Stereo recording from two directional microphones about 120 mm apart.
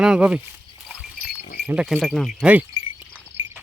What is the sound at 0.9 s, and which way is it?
Goat, centre (ahead or behind).